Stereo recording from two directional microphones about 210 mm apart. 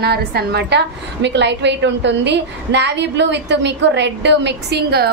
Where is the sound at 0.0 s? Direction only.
50° right (ahead or behind).